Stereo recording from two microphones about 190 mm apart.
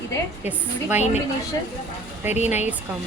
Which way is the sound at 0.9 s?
35° left (ahead or behind).